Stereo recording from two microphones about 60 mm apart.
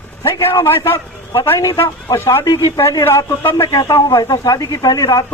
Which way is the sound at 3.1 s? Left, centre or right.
Left.